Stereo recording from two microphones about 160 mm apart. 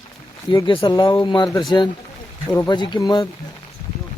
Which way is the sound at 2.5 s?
25° left (ahead or behind).